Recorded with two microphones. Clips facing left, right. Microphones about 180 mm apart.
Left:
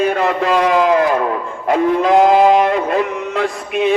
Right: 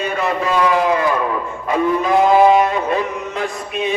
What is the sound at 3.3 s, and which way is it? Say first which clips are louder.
Music: left 4 dB; 80° left.